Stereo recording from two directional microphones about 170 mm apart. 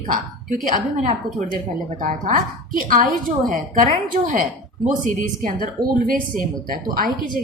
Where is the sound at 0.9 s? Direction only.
45° right (ahead or behind).